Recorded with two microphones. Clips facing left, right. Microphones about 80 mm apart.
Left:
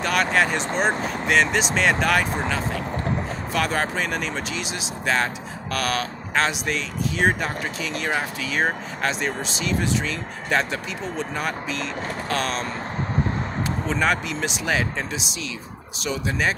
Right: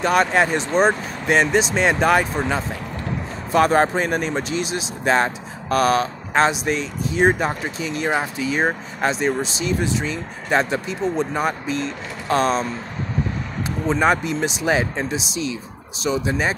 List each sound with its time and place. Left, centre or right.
0.0 s speech: right
13.8 s speech: right